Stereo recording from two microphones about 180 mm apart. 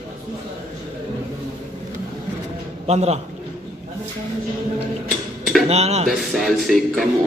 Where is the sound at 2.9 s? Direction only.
35° right (ahead or behind).